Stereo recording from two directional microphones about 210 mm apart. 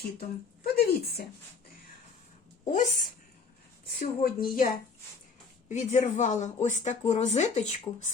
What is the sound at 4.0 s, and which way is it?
Speech, 45° left (ahead or behind).